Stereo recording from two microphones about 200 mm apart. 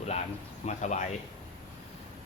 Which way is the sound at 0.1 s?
35° left (ahead or behind).